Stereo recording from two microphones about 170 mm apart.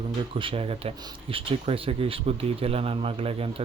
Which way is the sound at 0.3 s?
30° right (ahead or behind).